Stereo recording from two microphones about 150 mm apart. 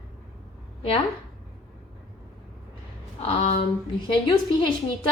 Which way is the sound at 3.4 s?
50° left (ahead or behind).